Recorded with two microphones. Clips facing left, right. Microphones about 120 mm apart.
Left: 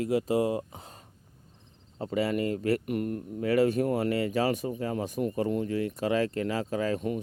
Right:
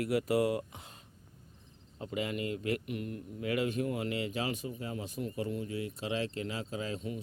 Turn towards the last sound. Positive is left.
turn(degrees=55)  # may be behind; listen again after turning